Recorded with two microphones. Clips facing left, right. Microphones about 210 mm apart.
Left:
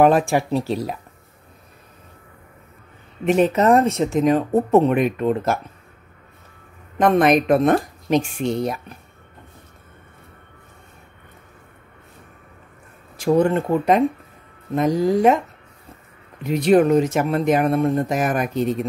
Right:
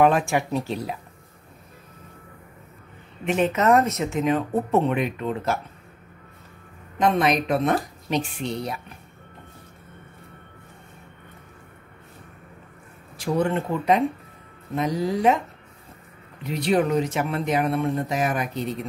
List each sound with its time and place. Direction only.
0.0 s speech: 35° left (ahead or behind)
3.3 s speech: 40° left (ahead or behind)
7.0 s speech: 55° left (ahead or behind)
13.2 s speech: 45° left (ahead or behind)
16.4 s speech: 50° left (ahead or behind)